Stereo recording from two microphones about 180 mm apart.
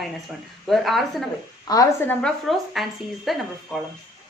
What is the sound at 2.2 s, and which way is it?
A woman's voice, centre (ahead or behind).